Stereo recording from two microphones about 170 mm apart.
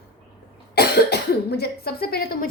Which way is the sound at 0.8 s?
70° left (ahead or behind).